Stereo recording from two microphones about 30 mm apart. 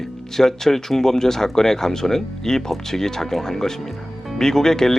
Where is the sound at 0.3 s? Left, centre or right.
Centre.